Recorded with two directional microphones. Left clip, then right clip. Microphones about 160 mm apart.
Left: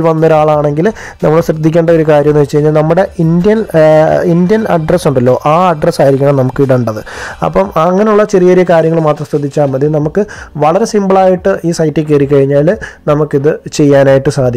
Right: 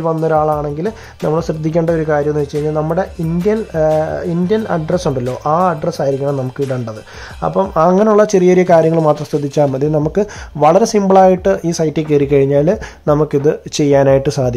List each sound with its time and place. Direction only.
0.0 s a man's voice: 35° left (ahead or behind)
7.9 s speech: 10° left (ahead or behind)